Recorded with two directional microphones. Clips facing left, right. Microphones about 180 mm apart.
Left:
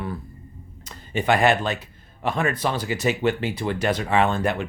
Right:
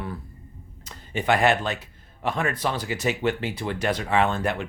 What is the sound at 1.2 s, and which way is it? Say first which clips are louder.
Speech: left 2 dB; 20° left (ahead or behind).